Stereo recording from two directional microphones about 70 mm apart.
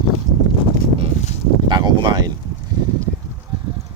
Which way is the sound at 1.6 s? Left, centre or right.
Right.